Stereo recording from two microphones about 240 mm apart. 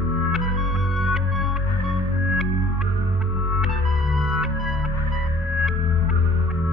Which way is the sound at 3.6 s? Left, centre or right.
Centre.